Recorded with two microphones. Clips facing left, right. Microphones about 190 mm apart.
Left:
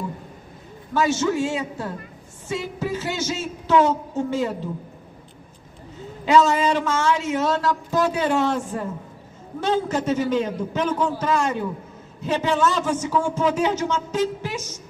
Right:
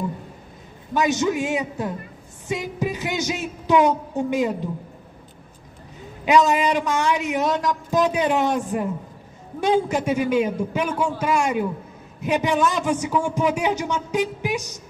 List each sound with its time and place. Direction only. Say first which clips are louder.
0.9 s a man's voice: even; 15° right (ahead or behind)
5.9 s a man's voice: even; 15° right (ahead or behind)